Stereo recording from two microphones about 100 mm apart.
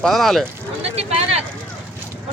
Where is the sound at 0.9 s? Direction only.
90° right.